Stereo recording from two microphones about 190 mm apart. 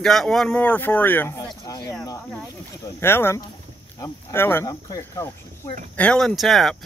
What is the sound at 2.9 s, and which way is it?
Speech, 10° left (ahead or behind).